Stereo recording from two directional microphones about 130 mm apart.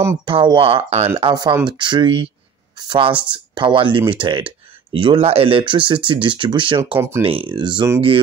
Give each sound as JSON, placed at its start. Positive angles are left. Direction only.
{"t": 0.2, "sound": "speech", "side_deg": -40}
{"t": 1.1, "sound": "speech", "side_deg": -35}
{"t": 7.0, "sound": "speech", "side_deg": -20}
{"t": 7.2, "sound": "speech", "side_deg": -40}